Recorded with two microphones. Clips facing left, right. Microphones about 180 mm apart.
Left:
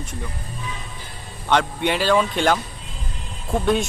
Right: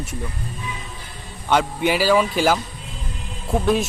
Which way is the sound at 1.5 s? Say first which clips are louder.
Right 1 dB; 5° right (ahead or behind).